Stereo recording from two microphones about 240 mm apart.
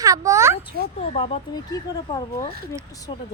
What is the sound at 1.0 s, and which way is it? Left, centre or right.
Speech, left.